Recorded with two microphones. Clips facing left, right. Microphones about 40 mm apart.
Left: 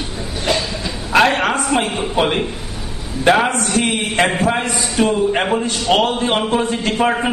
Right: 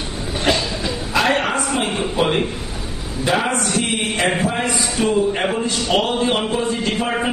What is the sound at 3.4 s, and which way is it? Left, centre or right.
A man's voice, left.